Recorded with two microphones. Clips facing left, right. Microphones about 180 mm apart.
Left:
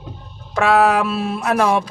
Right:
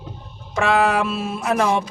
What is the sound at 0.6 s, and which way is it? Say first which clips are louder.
Speech: left 3 dB; 5° left (ahead or behind).